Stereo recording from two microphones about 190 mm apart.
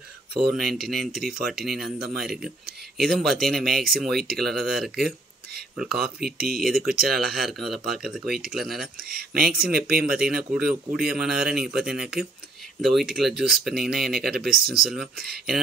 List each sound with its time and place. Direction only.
0.3 s speech: 60° right (ahead or behind)
0.6 s speech: centre (ahead or behind)
6.2 s speech: 55° right (ahead or behind)
6.6 s speech: centre (ahead or behind)
8.9 s speech: 50° right (ahead or behind)
10.0 s speech: 5° right (ahead or behind)
15.2 s speech: 55° right (ahead or behind)